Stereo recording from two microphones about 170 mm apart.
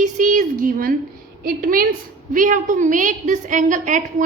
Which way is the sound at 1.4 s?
55° right (ahead or behind).